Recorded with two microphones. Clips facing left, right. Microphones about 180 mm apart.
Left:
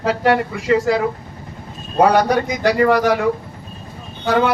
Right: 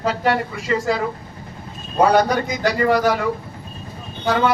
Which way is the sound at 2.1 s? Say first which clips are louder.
Left 1 dB; 60° left (ahead or behind).